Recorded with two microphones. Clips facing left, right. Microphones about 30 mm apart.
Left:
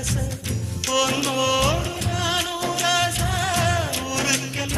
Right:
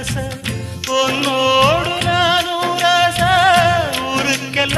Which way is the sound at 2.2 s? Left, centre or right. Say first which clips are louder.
Right 8 dB; right.